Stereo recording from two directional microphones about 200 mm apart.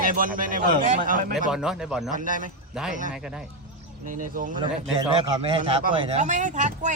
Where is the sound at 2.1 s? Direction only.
40° right (ahead or behind).